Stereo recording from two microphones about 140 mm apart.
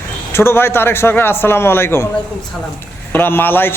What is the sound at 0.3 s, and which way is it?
A man's voice, 15° left (ahead or behind).